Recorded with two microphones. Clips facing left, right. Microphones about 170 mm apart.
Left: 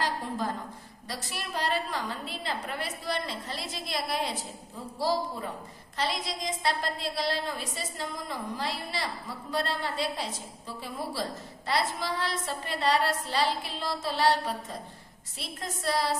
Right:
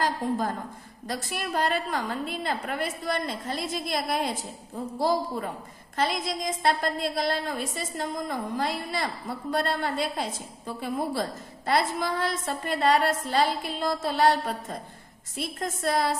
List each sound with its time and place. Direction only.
0.0 s a sound: 45° right (ahead or behind)
1.0 s a woman's voice: 50° right (ahead or behind)
6.0 s a woman's voice: 50° right (ahead or behind)